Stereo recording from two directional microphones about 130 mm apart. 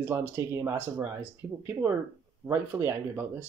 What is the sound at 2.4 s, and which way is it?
Speech, 20° right (ahead or behind).